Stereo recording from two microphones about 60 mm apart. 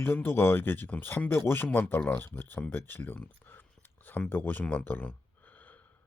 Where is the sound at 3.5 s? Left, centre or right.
Left.